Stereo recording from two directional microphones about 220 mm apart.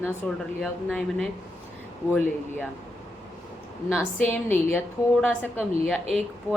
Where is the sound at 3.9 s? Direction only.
5° left (ahead or behind).